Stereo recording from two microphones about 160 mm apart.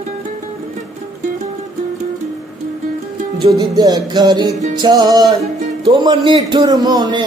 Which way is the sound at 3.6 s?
25° right (ahead or behind).